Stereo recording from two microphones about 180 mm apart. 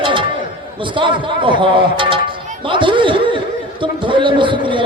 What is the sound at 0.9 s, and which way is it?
A man's voice, 30° right (ahead or behind).